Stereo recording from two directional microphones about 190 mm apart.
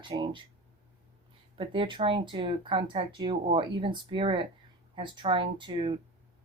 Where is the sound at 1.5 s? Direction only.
25° right (ahead or behind).